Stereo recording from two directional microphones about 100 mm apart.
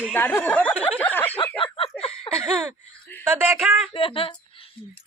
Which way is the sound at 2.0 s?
75° left (ahead or behind).